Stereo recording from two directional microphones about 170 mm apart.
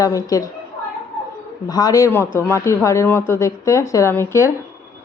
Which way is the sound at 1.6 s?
20° left (ahead or behind).